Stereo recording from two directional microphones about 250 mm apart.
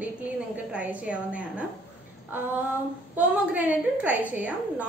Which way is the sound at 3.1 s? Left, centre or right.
Centre.